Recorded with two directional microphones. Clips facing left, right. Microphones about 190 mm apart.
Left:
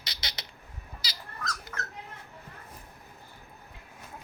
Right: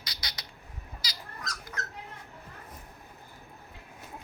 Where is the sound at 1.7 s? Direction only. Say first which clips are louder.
Even; 15° right (ahead or behind).